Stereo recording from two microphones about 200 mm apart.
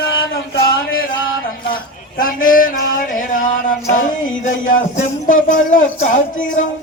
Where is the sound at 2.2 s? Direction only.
45° left (ahead or behind).